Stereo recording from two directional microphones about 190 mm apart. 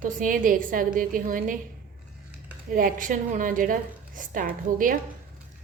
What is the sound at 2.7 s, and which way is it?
A woman's voice, 45° right (ahead or behind).